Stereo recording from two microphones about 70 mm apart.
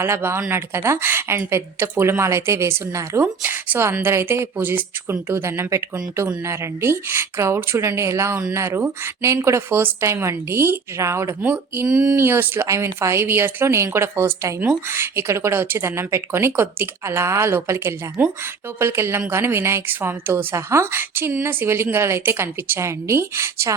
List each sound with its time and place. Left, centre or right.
0.0 s a woman's voice: right
11.4 s speech: right
11.9 s a sound: centre
12.1 s a woman's voice: right